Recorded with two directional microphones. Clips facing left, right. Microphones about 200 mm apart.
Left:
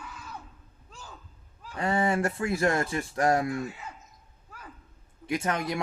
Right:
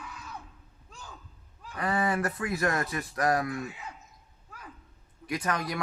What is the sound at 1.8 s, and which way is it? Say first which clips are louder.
Speech: left 2 dB; 25° left (ahead or behind).